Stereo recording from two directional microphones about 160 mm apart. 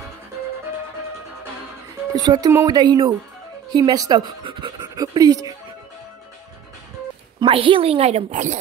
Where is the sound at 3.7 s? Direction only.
25° right (ahead or behind).